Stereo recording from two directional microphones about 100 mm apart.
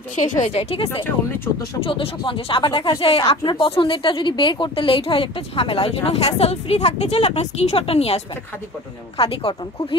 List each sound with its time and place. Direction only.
0.5 s speech: 90° left
1.8 s speech: 60° left (ahead or behind); by 8.2 s 85° left
9.2 s speech: 65° left (ahead or behind)